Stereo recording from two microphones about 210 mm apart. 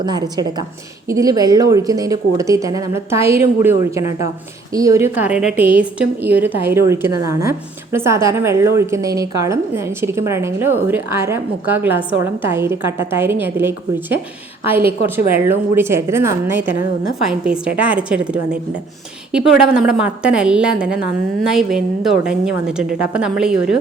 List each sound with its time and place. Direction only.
0.0 s a woman's voice: 20° right (ahead or behind)
16.7 s a woman's voice: 45° left (ahead or behind)
17.2 s a woman's voice: 5° right (ahead or behind)